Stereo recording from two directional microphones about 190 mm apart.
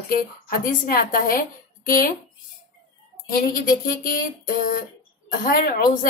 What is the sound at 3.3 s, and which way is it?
A woman's voice, 50° left (ahead or behind).